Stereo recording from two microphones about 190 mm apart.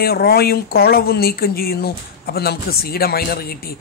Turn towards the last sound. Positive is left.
turn(degrees=50)  # may be behind; listen again after turning